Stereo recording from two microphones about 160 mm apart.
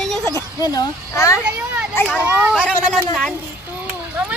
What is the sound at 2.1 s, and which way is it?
Speech, 10° right (ahead or behind).